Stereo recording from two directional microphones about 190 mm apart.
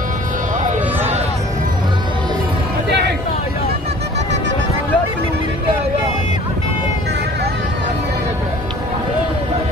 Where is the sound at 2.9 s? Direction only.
60° right (ahead or behind).